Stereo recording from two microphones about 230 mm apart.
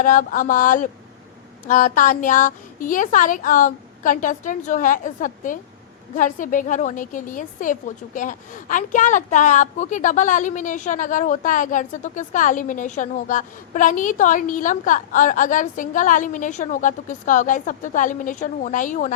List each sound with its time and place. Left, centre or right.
0.0 s a woman's voice: left